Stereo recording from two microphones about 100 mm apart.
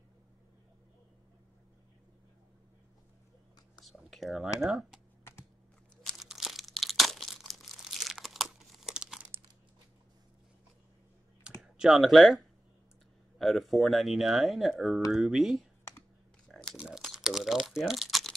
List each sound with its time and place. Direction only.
3.8 s whispering: centre (ahead or behind)
4.6 s speech: centre (ahead or behind)
6.1 s crumpling: 5° right (ahead or behind)
11.8 s speech: centre (ahead or behind)
16.4 s a sound: 5° left (ahead or behind)
16.7 s crumpling: 10° right (ahead or behind)